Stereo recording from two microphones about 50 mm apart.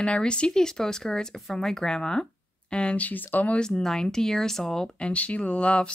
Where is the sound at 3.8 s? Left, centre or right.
Centre.